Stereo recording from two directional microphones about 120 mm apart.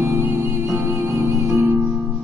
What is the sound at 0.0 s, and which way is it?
Music, 20° right (ahead or behind).